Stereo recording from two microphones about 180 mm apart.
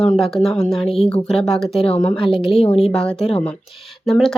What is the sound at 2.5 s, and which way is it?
Speech, 35° left (ahead or behind).